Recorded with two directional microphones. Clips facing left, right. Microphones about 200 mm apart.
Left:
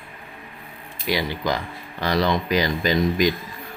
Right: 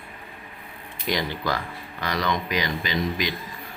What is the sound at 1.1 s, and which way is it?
Speech, 10° left (ahead or behind).